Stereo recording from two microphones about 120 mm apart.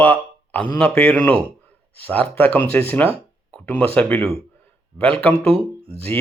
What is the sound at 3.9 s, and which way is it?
Speech, 20° left (ahead or behind).